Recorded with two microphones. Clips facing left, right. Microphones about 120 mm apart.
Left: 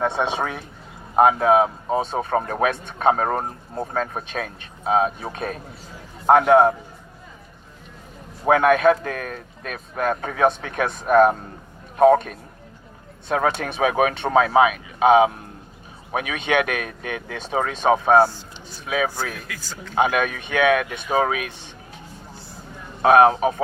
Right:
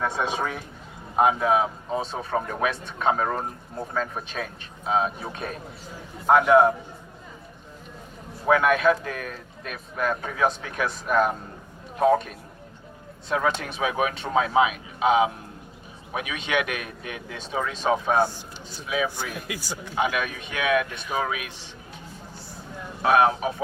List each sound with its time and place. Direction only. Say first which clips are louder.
0.0 s speech: left 4 dB; 25° left (ahead or behind)
1.1 s speech: left 5 dB; 50° left (ahead or behind)
8.4 s speech: left 4 dB; 45° left (ahead or behind); by 14.6 s 60° left (ahead or behind)
16.2 s speech: left 5 dB; 50° left (ahead or behind)
18.3 s a man's voice: even; 15° right (ahead or behind)
20.0 s speech: left 6 dB; 50° left (ahead or behind)
23.0 s speech: left 6 dB; 50° left (ahead or behind)